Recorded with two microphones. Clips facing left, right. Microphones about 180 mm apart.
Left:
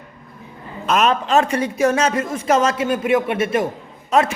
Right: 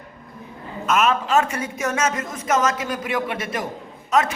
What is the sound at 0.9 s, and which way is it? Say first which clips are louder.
A man's voice: left 2 dB; 35° left (ahead or behind).